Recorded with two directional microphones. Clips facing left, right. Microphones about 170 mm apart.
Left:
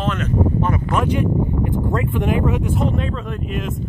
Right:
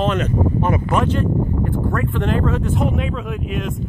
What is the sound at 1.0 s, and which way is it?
Speech, 15° left (ahead or behind).